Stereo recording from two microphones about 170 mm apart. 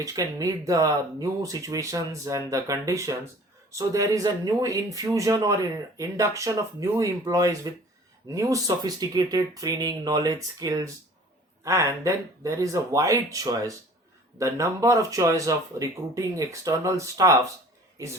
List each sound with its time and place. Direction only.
0.0 s speech: 20° right (ahead or behind)